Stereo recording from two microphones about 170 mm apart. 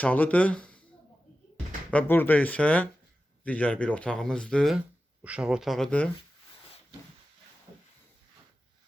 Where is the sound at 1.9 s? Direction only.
10° left (ahead or behind).